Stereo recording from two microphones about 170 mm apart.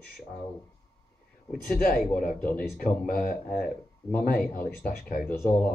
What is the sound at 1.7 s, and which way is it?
Speech, 55° left (ahead or behind).